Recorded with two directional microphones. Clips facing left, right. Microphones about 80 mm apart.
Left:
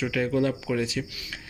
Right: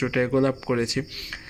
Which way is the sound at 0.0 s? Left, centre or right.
Right.